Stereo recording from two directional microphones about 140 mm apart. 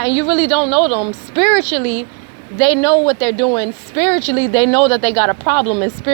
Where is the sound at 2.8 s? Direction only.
45° left (ahead or behind).